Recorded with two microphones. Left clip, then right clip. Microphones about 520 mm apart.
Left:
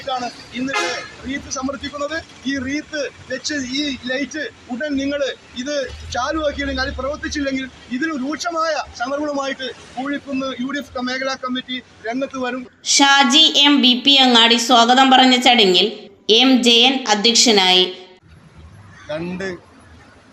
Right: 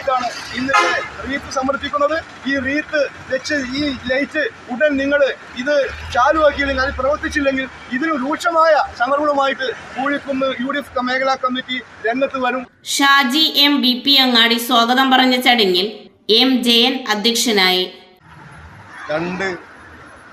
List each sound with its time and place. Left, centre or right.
1.3 s speech: left
12.8 s a woman's voice: centre